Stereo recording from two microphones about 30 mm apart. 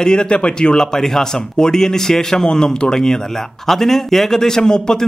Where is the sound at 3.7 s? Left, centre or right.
Centre.